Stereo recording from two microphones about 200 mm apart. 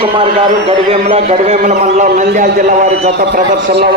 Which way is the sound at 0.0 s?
25° right (ahead or behind).